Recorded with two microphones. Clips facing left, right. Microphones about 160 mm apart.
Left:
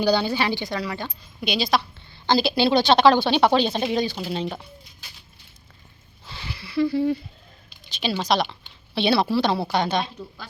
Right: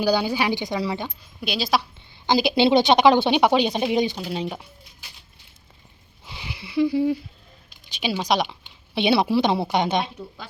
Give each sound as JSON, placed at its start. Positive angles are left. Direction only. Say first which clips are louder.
{"t": 0.0, "sound": "a woman's voice", "louder": "even", "side_deg": -10}
{"t": 1.0, "sound": "a woman's voice", "louder": "left 1 dB", "side_deg": -5}
{"t": 4.3, "sound": "a woman's voice", "louder": "even", "side_deg": -10}
{"t": 6.2, "sound": "a sound", "louder": "even", "side_deg": -15}
{"t": 7.9, "sound": "a woman's voice", "louder": "even", "side_deg": -10}